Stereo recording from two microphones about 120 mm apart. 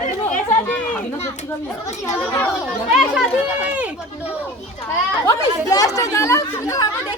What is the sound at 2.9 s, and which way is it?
Speech, 5° right (ahead or behind).